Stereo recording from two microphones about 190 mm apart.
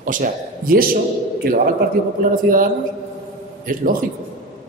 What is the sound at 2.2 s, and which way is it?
Speech, 45° right (ahead or behind).